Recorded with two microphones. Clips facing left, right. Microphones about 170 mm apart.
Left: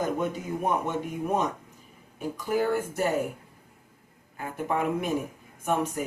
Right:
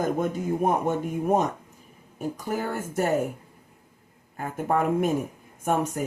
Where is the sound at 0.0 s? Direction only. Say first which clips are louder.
Right 3 dB; 45° right (ahead or behind).